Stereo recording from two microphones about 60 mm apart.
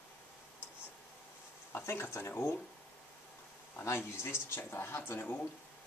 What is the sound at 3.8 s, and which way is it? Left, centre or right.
Speech, left.